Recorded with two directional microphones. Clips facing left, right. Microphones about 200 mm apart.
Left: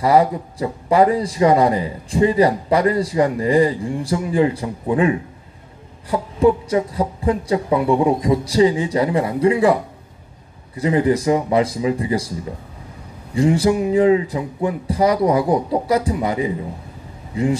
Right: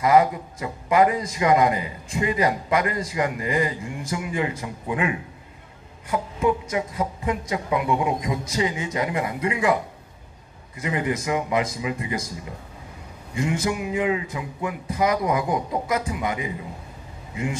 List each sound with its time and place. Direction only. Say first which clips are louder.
0.0 s a man's voice: left 3 dB; 35° left (ahead or behind)
10.8 s a man's voice: left 9 dB; 35° left (ahead or behind)
13.3 s a man's voice: left 9 dB; 35° left (ahead or behind)